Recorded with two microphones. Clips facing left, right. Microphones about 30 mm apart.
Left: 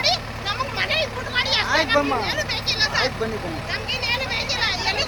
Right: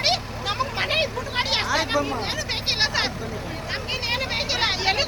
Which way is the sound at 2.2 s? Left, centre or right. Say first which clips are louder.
Left 3 dB; centre.